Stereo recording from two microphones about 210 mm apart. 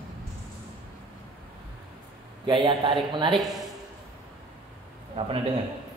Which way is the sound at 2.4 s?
25° right (ahead or behind).